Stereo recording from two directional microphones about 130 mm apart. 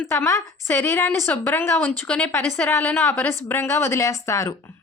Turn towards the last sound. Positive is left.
turn(degrees=25)  # may be behind; listen again after turning